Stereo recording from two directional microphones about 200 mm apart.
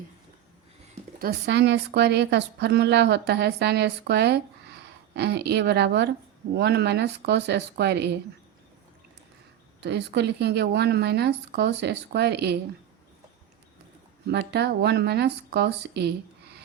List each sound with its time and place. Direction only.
1.2 s a woman's voice: 50° right (ahead or behind)
9.8 s a woman's voice: 55° right (ahead or behind)
14.3 s a woman's voice: 55° right (ahead or behind)